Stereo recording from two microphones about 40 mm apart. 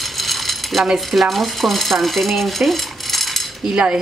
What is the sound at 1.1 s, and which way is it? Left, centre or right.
Speech, centre.